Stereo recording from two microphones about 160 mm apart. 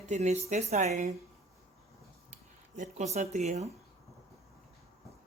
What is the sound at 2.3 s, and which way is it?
Speech, 50° right (ahead or behind).